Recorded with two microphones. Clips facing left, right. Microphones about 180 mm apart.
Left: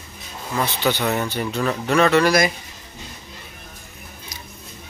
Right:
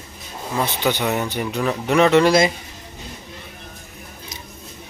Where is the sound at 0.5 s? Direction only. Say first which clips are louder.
Even; 15° right (ahead or behind).